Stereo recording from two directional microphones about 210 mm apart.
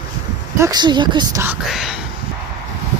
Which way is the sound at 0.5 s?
15° right (ahead or behind).